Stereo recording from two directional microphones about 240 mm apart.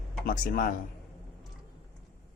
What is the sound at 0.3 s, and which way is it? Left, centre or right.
Speech, left.